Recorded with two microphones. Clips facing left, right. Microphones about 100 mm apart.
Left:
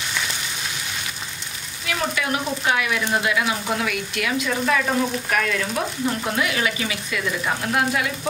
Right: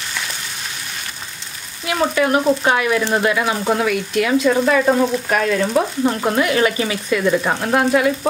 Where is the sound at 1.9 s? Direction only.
40° right (ahead or behind).